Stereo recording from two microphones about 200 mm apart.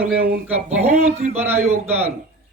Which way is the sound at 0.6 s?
30° right (ahead or behind).